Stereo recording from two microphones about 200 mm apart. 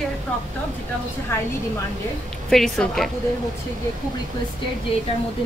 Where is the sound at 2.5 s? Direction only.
5° left (ahead or behind).